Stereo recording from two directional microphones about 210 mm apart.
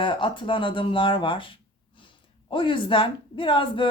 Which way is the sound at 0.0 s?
25° left (ahead or behind).